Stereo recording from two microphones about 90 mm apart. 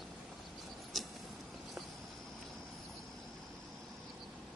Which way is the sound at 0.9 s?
Centre (ahead or behind).